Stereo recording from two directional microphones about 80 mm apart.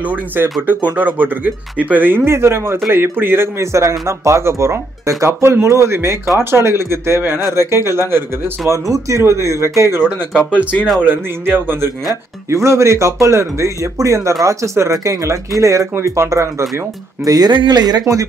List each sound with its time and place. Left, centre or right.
0.1 s speech: right
11.0 s speech: right
12.4 s speech: right
17.2 s speech: right